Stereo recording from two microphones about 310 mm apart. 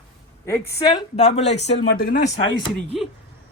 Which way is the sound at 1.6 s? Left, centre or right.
Left.